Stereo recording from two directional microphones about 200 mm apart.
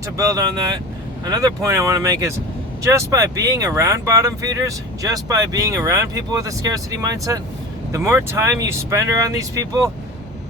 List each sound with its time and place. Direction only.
0.2 s speech: 15° right (ahead or behind)